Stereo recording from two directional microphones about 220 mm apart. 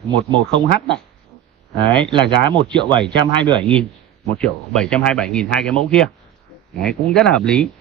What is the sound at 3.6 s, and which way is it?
Speech, 5° left (ahead or behind).